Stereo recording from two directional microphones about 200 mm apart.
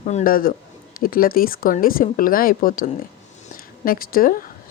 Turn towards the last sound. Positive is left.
turn(degrees=45)  # may be behind; listen again after turning